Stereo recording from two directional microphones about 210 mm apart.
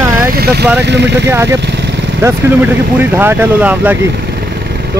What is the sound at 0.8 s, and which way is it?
Speech, 55° right (ahead or behind).